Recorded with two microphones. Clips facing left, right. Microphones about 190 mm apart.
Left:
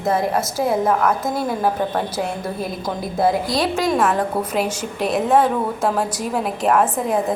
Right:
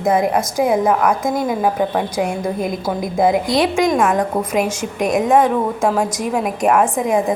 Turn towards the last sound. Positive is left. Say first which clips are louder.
# right 2 dB
turn(degrees=-10)  # may be behind; listen again after turning